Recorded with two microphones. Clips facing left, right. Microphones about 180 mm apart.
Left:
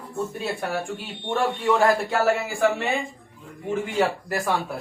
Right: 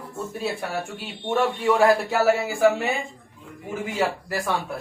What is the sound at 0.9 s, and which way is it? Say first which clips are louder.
A man's voice: right 2 dB; 5° right (ahead or behind).